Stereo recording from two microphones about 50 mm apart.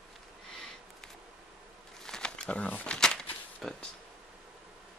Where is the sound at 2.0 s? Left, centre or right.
Centre.